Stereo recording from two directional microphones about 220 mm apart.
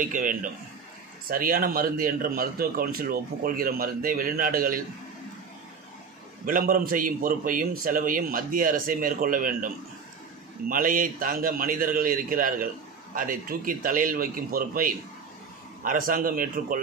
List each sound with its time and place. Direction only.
0.0 s a man's voice: 35° right (ahead or behind)
6.4 s a man's voice: 40° right (ahead or behind)
10.7 s a man's voice: 40° right (ahead or behind)